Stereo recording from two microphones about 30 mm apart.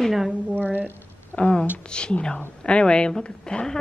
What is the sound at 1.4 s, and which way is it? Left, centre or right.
Speech, left.